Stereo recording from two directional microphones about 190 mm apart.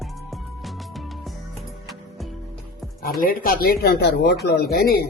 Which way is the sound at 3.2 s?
45° left (ahead or behind).